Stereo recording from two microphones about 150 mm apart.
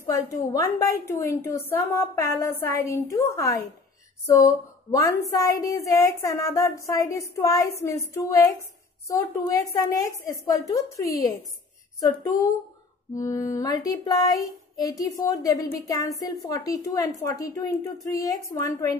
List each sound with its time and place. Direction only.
0.0 s a woman's voice: 20° left (ahead or behind)
4.9 s a woman's voice: 20° left (ahead or behind)
13.1 s a woman's voice: 20° left (ahead or behind)